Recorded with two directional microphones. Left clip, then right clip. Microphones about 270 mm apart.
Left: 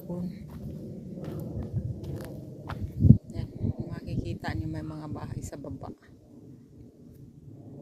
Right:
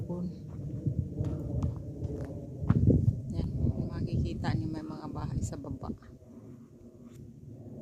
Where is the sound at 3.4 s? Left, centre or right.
Centre.